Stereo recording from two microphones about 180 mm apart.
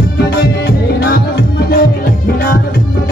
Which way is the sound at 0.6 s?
65° left (ahead or behind).